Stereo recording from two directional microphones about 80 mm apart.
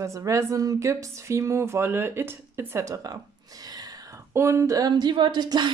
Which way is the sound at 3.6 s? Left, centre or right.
Right.